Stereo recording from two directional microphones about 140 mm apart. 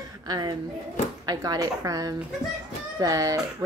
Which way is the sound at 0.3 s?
30° right (ahead or behind).